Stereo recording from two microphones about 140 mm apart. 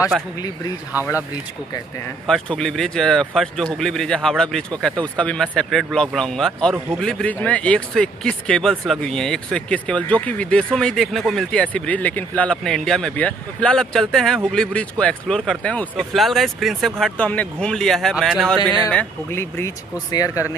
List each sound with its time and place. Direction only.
2.2 s speech: 5° left (ahead or behind)
18.9 s speech: 15° left (ahead or behind)